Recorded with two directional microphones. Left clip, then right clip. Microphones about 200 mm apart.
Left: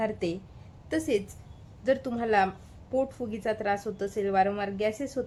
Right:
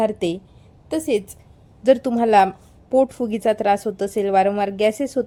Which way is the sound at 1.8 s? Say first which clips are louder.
Right 11 dB; 40° right (ahead or behind).